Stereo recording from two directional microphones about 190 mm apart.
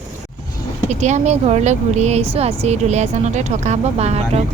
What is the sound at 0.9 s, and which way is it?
Speech, 40° right (ahead or behind).